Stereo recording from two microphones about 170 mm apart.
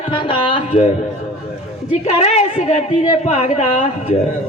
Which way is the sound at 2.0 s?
40° left (ahead or behind).